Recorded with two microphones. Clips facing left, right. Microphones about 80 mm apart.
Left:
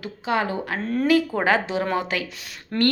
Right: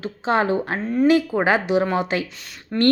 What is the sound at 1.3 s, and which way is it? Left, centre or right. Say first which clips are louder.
Speech: right 3 dB; centre.